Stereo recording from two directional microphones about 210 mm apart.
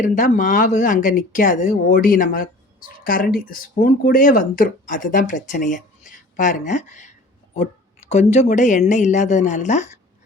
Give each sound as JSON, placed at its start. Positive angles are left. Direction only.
{"t": 0.0, "sound": "speech", "side_deg": 35}